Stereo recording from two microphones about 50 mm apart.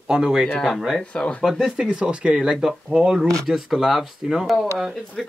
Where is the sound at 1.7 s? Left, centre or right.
Centre.